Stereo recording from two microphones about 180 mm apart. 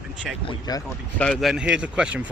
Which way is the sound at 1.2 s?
Centre (ahead or behind).